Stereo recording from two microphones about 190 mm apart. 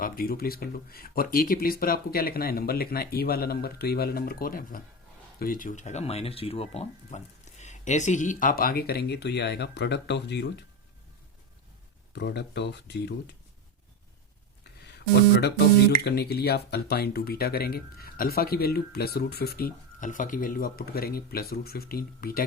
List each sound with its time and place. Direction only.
0.0 s speech: 50° left (ahead or behind)
12.1 s speech: 65° left (ahead or behind)
14.8 s speech: 60° left (ahead or behind)